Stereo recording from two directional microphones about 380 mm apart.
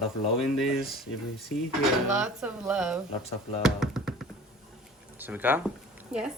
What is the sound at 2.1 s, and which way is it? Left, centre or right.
Speech, centre.